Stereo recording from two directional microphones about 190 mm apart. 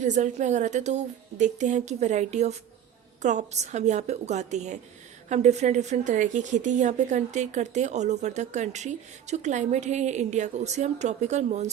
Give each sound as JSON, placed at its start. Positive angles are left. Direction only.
{"t": 0.0, "sound": "a woman's voice", "side_deg": -40}